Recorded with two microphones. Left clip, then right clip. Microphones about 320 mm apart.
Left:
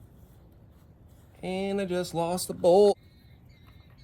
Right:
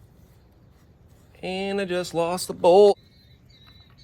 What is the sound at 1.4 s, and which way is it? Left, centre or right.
Speech, centre.